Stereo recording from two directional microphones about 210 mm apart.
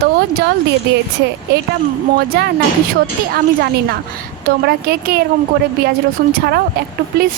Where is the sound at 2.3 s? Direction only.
50° right (ahead or behind).